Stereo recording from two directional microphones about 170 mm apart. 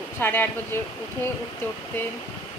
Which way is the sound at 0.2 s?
10° left (ahead or behind).